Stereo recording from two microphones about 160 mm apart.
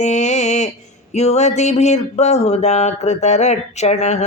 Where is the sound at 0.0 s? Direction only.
45° left (ahead or behind).